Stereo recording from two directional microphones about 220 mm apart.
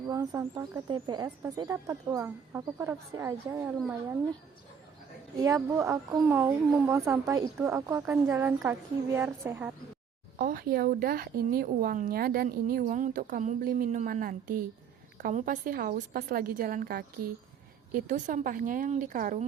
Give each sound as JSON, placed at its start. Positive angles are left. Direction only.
{"t": 0.1, "sound": "speech", "side_deg": -15}
{"t": 5.4, "sound": "speech", "side_deg": -15}
{"t": 10.3, "sound": "speech", "side_deg": -40}